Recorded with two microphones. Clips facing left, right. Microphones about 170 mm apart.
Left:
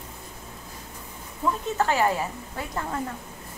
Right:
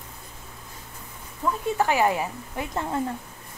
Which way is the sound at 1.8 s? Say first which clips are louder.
Right 1 dB; 15° right (ahead or behind).